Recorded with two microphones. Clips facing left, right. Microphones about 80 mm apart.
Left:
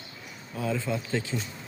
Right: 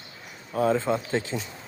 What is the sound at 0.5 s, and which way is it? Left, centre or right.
Speech, right.